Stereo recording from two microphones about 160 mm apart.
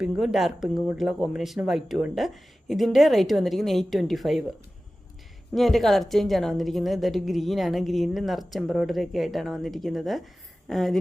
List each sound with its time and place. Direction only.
0.0 s a woman's voice: 5° right (ahead or behind)
5.5 s a woman's voice: centre (ahead or behind)